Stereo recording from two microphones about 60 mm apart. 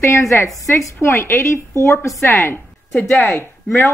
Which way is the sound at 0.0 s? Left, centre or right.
Left.